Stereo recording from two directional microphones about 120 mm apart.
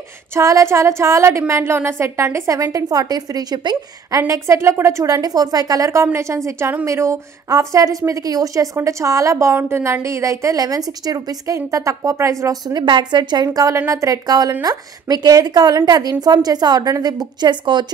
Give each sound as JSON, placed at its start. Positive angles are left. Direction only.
{"t": 0.3, "sound": "a woman's voice", "side_deg": -25}
{"t": 4.2, "sound": "a woman's voice", "side_deg": -25}